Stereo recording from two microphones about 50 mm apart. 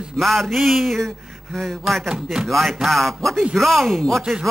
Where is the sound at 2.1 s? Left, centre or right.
Centre.